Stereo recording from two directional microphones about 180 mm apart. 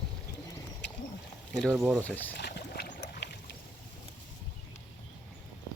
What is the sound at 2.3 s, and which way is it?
Boat, 65° left (ahead or behind).